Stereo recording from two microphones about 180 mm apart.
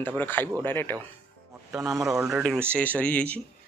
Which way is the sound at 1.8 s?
20° right (ahead or behind).